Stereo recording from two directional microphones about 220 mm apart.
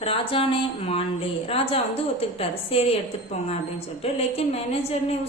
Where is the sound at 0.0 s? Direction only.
25° left (ahead or behind).